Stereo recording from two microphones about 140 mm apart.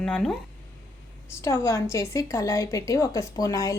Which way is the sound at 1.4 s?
20° left (ahead or behind).